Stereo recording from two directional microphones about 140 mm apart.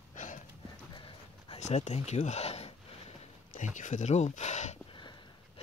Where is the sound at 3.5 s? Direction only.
65° left (ahead or behind).